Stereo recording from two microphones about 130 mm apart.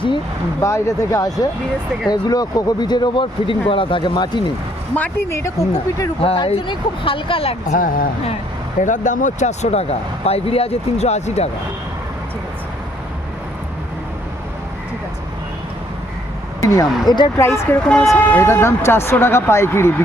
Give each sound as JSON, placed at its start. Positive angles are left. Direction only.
{"t": 0.6, "sound": "speech", "side_deg": 25}
{"t": 4.9, "sound": "speech", "side_deg": 15}
{"t": 6.2, "sound": "speech", "side_deg": 45}
{"t": 7.7, "sound": "speech", "side_deg": 90}
{"t": 8.8, "sound": "speech", "side_deg": 75}
{"t": 16.6, "sound": "a sound", "side_deg": 25}
{"t": 17.1, "sound": "speech", "side_deg": 35}
{"t": 17.4, "sound": "speech", "side_deg": 20}
{"t": 17.8, "sound": "speech", "side_deg": 5}
{"t": 18.1, "sound": "speech", "side_deg": 20}